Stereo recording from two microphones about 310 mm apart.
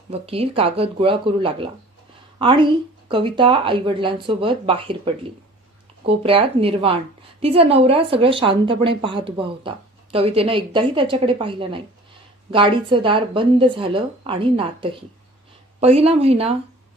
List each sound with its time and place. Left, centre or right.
0.1 s a woman's voice: centre